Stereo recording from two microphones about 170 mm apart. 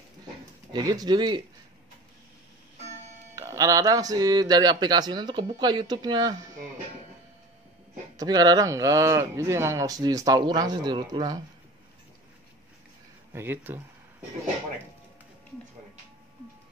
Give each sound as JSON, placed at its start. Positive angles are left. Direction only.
{"t": 0.7, "sound": "speech", "side_deg": -25}
{"t": 3.3, "sound": "speech", "side_deg": -20}
{"t": 8.2, "sound": "speech", "side_deg": -25}
{"t": 13.3, "sound": "speech", "side_deg": -15}